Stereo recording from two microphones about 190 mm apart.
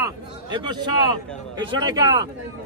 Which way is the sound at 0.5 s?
25° right (ahead or behind).